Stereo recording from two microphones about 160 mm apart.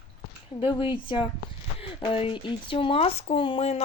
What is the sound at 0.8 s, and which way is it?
Speech, 30° left (ahead or behind).